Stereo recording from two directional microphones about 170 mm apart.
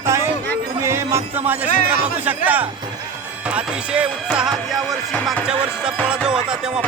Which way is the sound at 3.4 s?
5° right (ahead or behind).